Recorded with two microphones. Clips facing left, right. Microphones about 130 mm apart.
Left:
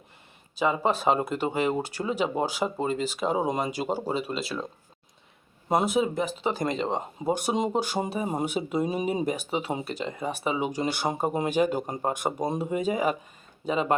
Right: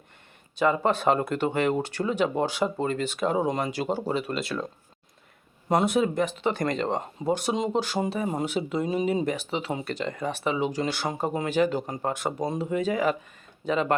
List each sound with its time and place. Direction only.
0.6 s speech: 10° left (ahead or behind)
5.9 s speech: 10° left (ahead or behind)
7.3 s speech: 15° left (ahead or behind)